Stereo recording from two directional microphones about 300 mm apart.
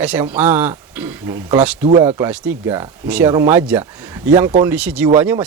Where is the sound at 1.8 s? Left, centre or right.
Right.